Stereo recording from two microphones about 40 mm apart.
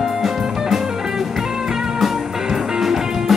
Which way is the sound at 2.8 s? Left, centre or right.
Centre.